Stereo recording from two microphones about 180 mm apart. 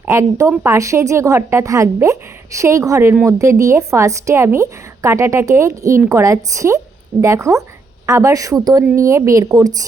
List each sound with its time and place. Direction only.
0.0 s a woman's voice: 15° right (ahead or behind)